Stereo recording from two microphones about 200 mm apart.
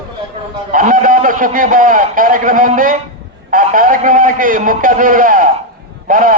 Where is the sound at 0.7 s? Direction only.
40° right (ahead or behind).